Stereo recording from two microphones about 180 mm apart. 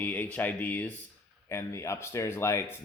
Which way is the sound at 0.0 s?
10° left (ahead or behind).